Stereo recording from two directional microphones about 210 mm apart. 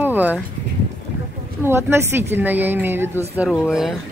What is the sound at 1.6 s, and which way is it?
A woman's voice, 10° right (ahead or behind).